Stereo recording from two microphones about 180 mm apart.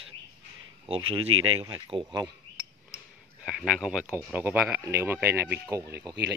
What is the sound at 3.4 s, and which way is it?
Speech, 5° right (ahead or behind).